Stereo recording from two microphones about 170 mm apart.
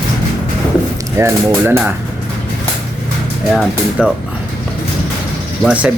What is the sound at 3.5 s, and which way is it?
Speech, centre (ahead or behind).